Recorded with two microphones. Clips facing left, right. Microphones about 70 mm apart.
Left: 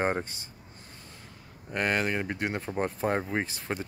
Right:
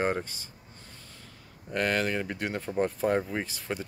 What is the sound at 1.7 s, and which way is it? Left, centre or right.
Speech, left.